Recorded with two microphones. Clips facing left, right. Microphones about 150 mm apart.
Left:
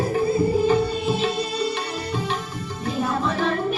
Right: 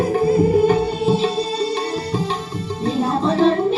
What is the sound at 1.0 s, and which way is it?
Music, 35° right (ahead or behind).